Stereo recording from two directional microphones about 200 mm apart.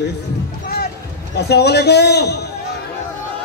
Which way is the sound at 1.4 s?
55° left (ahead or behind).